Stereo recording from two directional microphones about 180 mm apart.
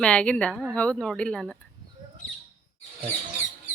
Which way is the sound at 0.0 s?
5° left (ahead or behind).